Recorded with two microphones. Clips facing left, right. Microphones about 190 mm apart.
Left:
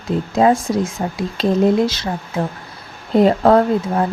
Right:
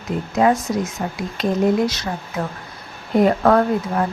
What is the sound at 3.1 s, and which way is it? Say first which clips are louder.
Speech: left 3 dB; 25° left (ahead or behind).